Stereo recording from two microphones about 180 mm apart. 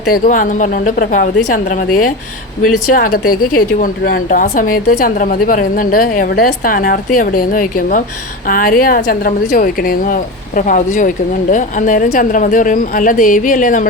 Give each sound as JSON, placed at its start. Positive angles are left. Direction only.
{"t": 0.1, "sound": "a woman's voice", "side_deg": 45}